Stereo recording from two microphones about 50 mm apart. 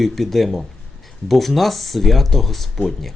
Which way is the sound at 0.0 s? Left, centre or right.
Centre.